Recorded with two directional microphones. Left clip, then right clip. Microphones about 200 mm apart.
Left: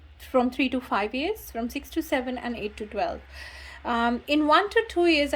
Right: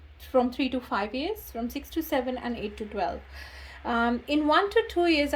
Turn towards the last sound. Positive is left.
turn(degrees=5)  # may be behind; listen again after turning